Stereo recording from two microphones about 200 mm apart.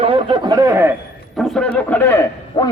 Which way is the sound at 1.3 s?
Centre (ahead or behind).